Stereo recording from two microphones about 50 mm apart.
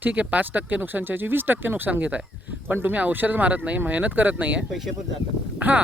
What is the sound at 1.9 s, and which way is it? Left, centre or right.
Speech, right.